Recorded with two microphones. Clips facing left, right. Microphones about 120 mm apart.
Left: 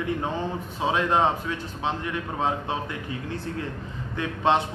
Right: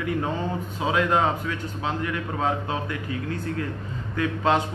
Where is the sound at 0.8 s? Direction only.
25° left (ahead or behind).